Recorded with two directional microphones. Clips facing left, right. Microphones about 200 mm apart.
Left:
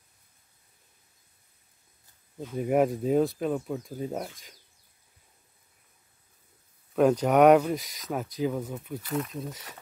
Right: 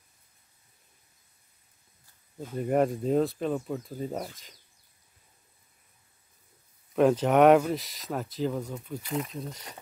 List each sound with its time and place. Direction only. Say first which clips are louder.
2.5 s speech: left 1 dB; 5° left (ahead or behind)
7.0 s speech: even; centre (ahead or behind)
9.0 s speech: left 1 dB; 15° right (ahead or behind)
9.3 s speech: left 1 dB; centre (ahead or behind)